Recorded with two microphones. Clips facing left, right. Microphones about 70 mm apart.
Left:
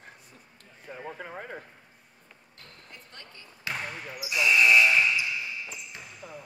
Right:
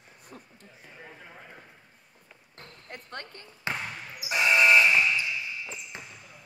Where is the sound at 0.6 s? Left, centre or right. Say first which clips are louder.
Left 6 dB; left.